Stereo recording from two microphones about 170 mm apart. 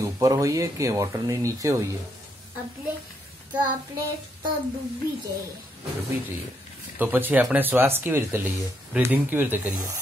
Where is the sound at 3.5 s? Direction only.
10° right (ahead or behind).